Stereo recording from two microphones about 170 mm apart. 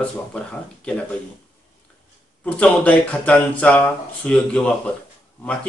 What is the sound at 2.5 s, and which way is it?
Speech, 10° left (ahead or behind).